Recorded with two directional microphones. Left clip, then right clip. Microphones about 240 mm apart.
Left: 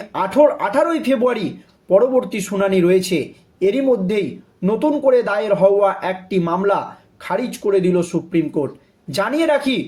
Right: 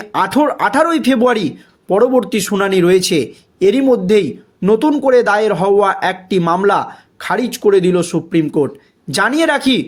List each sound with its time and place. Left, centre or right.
0.1 s a man's voice: right